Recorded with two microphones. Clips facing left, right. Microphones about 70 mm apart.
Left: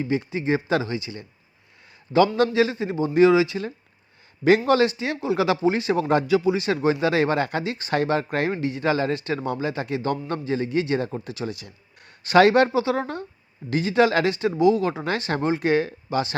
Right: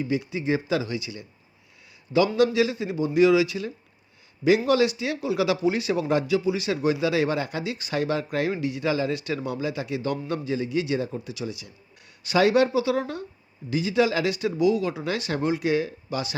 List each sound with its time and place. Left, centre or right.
0.0 s a man's voice: left
4.4 s a man's voice: left
14.3 s a man's voice: left